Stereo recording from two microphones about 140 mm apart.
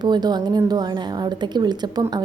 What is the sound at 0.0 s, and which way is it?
A woman's voice, 30° right (ahead or behind).